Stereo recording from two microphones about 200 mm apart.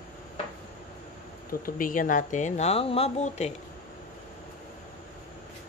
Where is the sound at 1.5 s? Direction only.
45° left (ahead or behind).